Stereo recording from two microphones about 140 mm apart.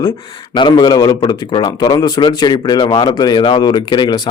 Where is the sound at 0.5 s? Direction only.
30° left (ahead or behind).